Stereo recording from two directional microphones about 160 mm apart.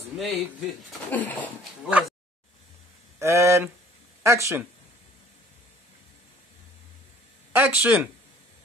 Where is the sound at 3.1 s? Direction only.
15° right (ahead or behind).